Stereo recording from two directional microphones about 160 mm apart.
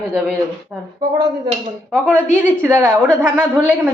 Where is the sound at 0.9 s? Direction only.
25° right (ahead or behind).